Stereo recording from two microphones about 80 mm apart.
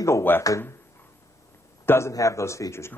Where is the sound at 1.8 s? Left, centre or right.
Left.